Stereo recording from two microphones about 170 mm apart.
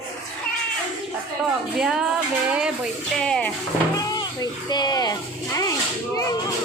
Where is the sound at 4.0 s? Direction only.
25° left (ahead or behind).